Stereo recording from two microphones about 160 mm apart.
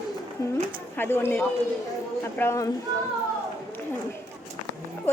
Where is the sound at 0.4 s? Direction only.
20° left (ahead or behind).